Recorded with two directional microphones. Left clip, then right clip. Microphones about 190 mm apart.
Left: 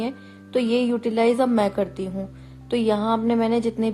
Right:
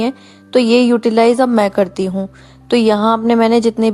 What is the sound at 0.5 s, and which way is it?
A woman's voice, 35° right (ahead or behind).